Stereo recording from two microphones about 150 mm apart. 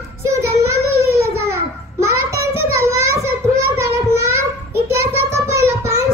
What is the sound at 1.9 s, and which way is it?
Child singing, 20° right (ahead or behind).